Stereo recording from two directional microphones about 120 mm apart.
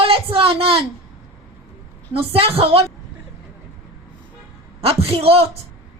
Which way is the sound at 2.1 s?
55° right (ahead or behind).